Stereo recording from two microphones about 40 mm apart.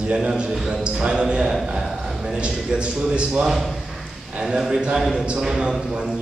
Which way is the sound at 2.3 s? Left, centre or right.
Right.